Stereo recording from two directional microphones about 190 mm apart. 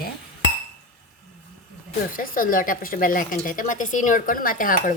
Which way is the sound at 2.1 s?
45° left (ahead or behind).